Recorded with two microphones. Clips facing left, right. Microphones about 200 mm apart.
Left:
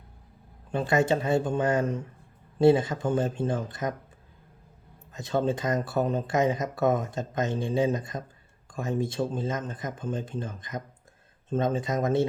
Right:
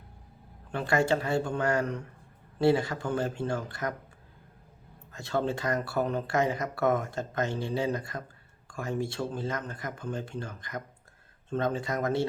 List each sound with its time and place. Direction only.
0.7 s speech: 20° left (ahead or behind)
5.1 s speech: 20° left (ahead or behind)